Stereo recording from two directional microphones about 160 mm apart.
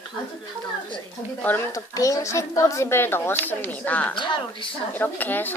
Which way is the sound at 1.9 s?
20° left (ahead or behind).